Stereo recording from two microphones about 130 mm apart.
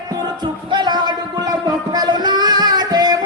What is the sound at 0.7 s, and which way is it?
Music, 35° right (ahead or behind).